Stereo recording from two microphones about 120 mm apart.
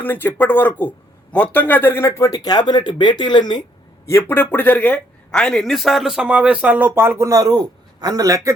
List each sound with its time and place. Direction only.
0.0 s a man's voice: 15° left (ahead or behind); by 3.6 s 40° left (ahead or behind)
4.0 s speech: 20° left (ahead or behind); by 8.5 s 30° right (ahead or behind)